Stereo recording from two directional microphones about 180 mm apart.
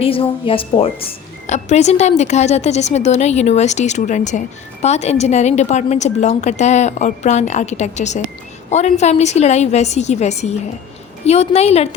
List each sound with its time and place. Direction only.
0.0 s a woman's voice: 30° left (ahead or behind)